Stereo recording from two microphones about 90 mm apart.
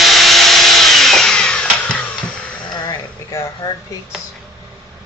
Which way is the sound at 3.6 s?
45° left (ahead or behind).